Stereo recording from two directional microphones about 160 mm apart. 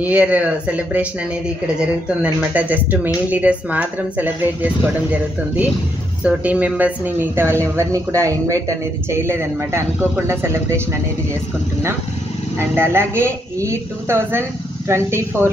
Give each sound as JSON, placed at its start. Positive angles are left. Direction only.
{"t": 0.0, "sound": "speech", "side_deg": -10}
{"t": 2.5, "sound": "speech", "side_deg": -10}
{"t": 6.2, "sound": "speech", "side_deg": -10}
{"t": 12.5, "sound": "speech", "side_deg": -15}